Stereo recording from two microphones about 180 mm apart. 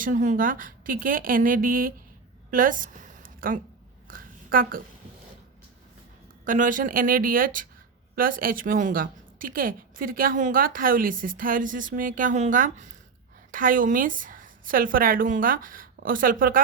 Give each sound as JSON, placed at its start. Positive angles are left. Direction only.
{"t": 0.0, "sound": "a woman's voice", "side_deg": -45}
{"t": 2.5, "sound": "a sound", "side_deg": -50}
{"t": 6.4, "sound": "a woman's voice", "side_deg": -50}